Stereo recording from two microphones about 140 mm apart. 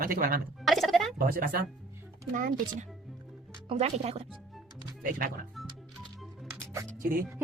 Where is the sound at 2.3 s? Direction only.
70° right (ahead or behind).